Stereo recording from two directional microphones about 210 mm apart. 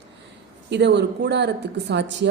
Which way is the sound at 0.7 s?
55° right (ahead or behind).